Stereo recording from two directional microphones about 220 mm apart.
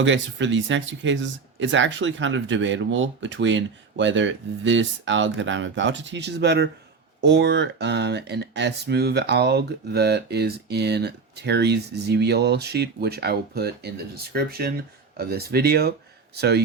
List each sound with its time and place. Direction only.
0.0 s speech: 55° right (ahead or behind)